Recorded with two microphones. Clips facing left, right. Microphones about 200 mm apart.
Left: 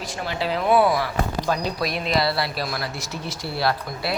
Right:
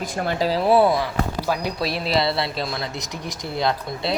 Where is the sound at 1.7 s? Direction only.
30° right (ahead or behind).